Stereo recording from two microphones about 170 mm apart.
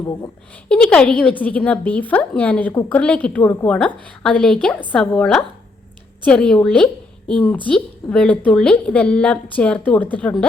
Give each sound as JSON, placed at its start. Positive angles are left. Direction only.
{"t": 0.0, "sound": "a woman's voice", "side_deg": 20}
{"t": 0.7, "sound": "a woman's voice", "side_deg": 5}